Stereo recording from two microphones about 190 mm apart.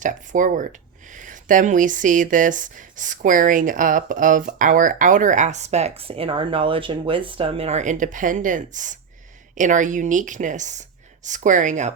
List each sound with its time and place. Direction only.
0.0 s a woman's voice: 40° right (ahead or behind)